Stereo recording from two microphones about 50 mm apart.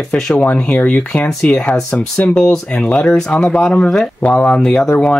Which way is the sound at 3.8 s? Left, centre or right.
Centre.